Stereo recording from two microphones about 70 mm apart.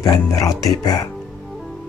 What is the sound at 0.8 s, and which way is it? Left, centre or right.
Speech, left.